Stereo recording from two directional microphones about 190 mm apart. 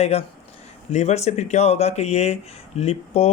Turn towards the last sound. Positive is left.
turn(degrees=35)  # may be behind; listen again after turning